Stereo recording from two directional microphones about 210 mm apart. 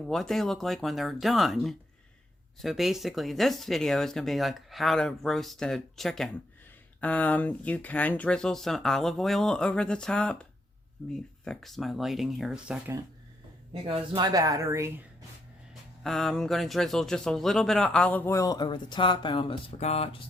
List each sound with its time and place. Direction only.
0.0 s speech: centre (ahead or behind)
13.8 s speech: 25° right (ahead or behind)
15.7 s speech: centre (ahead or behind); by 20.2 s 30° left (ahead or behind)